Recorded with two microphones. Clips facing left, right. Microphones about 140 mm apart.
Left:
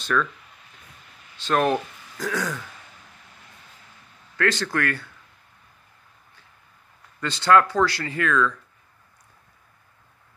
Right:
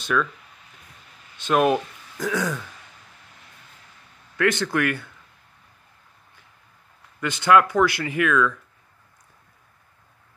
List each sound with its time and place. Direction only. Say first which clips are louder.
0.0 s speech: right 1 dB; 5° right (ahead or behind)
1.5 s speech: right 2 dB; 10° right (ahead or behind)
4.4 s speech: right 2 dB; 20° right (ahead or behind)
7.2 s speech: right 1 dB; 15° right (ahead or behind)